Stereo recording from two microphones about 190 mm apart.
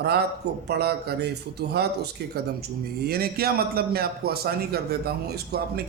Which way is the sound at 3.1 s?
55° right (ahead or behind).